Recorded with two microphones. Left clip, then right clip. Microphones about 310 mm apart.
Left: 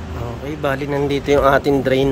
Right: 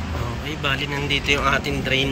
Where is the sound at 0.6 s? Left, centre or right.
Centre.